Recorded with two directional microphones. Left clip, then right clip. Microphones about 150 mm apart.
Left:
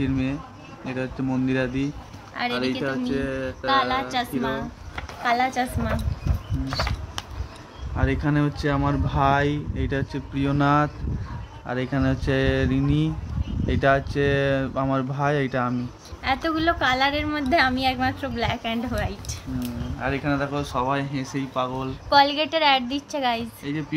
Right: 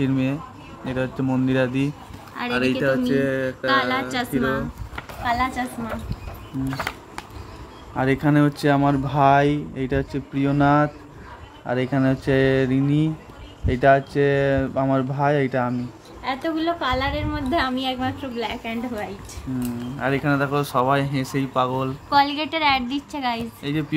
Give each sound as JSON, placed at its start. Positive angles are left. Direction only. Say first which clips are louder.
{"t": 0.0, "sound": "speech", "louder": "right 3 dB", "side_deg": -25}
{"t": 2.8, "sound": "speech", "louder": "right 6 dB", "side_deg": -45}
{"t": 3.6, "sound": "a woman's voice", "louder": "even", "side_deg": -5}
{"t": 4.9, "sound": "a sound", "louder": "left 1 dB", "side_deg": 30}
{"t": 7.9, "sound": "speech", "louder": "right 5 dB", "side_deg": -25}
{"t": 16.3, "sound": "a woman's voice", "louder": "left 1 dB", "side_deg": 35}
{"t": 20.0, "sound": "speech", "louder": "right 3 dB", "side_deg": -30}
{"t": 22.1, "sound": "a woman's voice", "louder": "left 1 dB", "side_deg": 10}
{"t": 23.6, "sound": "speech", "louder": "right 4 dB", "side_deg": -40}